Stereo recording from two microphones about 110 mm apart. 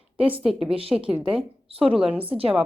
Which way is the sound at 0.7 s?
60° right (ahead or behind).